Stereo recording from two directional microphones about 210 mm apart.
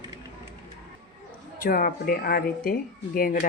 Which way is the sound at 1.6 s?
40° left (ahead or behind).